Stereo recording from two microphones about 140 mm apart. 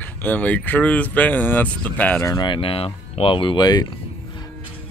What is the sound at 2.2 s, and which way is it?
Speech, 25° left (ahead or behind).